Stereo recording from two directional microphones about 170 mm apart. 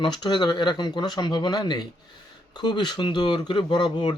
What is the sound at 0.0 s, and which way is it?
Speech, 25° left (ahead or behind).